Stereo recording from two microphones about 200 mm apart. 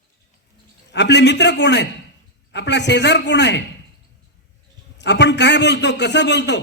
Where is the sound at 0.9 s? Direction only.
60° left (ahead or behind).